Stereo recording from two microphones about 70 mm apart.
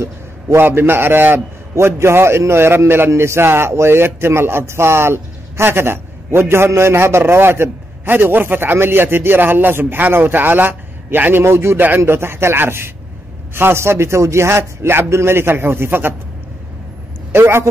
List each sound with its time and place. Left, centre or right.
0.0 s a man's voice: right
17.3 s a man's voice: right